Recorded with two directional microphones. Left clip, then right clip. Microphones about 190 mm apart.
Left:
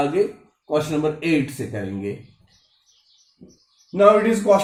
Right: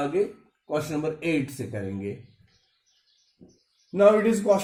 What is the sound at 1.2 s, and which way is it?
Speech, 40° right (ahead or behind).